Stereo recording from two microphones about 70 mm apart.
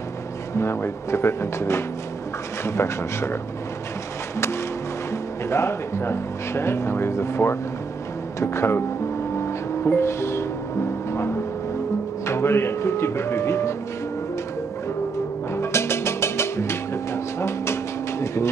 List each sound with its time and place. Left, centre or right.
0.6 s speech: left
5.5 s speech: left
9.8 s music: left
12.3 s speech: left
15.5 s music: left
18.2 s a sound: left